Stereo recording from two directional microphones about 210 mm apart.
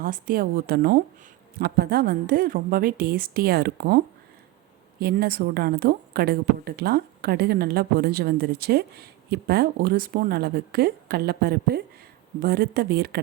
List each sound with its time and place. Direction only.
0.0 s a woman's voice: 40° right (ahead or behind)